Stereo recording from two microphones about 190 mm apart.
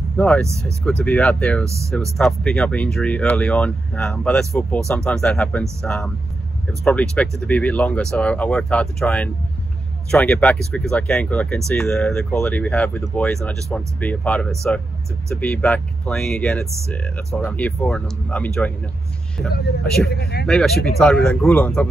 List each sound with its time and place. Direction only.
0.2 s speech: 5° left (ahead or behind)
20.1 s speech: 55° left (ahead or behind)
20.4 s speech: centre (ahead or behind)